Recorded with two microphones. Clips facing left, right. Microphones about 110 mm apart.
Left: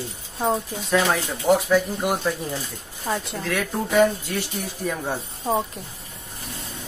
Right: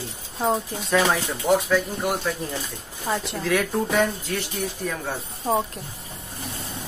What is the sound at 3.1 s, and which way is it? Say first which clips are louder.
Speech: right 2 dB; centre (ahead or behind).